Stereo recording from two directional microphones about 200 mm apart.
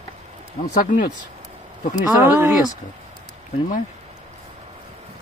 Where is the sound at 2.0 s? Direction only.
5° right (ahead or behind).